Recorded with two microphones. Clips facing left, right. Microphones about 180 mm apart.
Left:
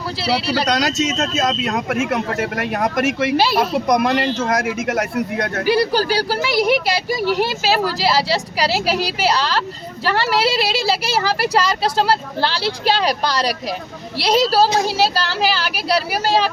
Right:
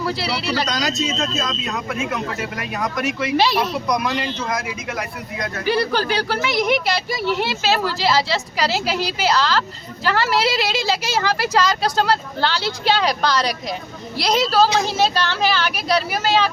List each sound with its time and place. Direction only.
0.7 s speech: 70° left (ahead or behind); by 5.0 s 50° left (ahead or behind)
5.1 s speech: 60° left (ahead or behind)
5.8 s speech: 35° left (ahead or behind)
14.8 s speech: 5° left (ahead or behind)
15.1 s speech: 35° left (ahead or behind)